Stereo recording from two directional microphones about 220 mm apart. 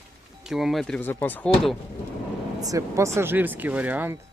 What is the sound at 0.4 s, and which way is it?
Speech, centre (ahead or behind).